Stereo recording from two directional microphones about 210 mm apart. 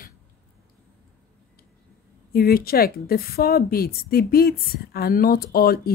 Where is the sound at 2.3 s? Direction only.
45° left (ahead or behind).